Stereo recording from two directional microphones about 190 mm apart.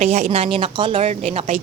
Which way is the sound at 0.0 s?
35° right (ahead or behind).